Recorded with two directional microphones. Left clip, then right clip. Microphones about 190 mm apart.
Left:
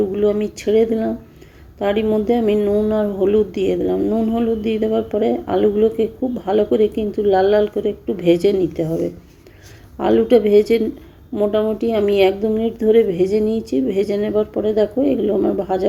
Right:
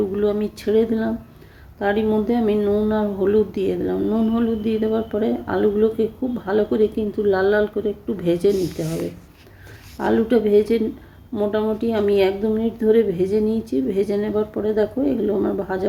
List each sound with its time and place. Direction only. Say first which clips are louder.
0.1 s a woman's voice: left 3 dB; centre (ahead or behind)
10.0 s a woman's voice: left 5 dB; centre (ahead or behind)